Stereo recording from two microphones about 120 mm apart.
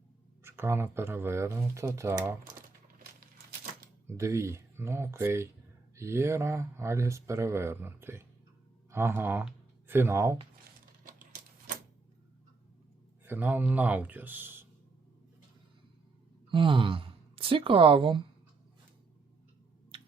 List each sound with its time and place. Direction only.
0.4 s speech: 20° right (ahead or behind)
4.0 s speech: 25° right (ahead or behind)
13.2 s speech: 15° right (ahead or behind)
16.5 s a woman's voice: 45° right (ahead or behind)